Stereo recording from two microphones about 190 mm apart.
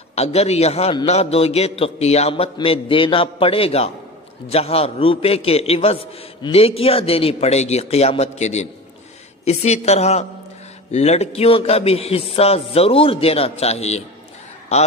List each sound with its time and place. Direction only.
0.1 s a man's voice: 35° left (ahead or behind)